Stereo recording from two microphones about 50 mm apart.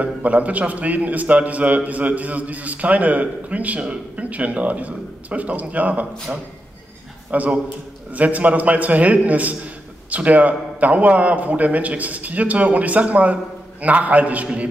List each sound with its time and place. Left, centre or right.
0.0 s a man's voice: right